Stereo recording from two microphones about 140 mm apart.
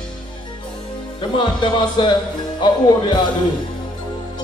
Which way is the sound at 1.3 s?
35° left (ahead or behind).